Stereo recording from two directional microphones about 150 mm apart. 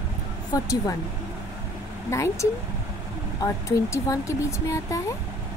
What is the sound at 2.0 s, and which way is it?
Speech, 20° left (ahead or behind).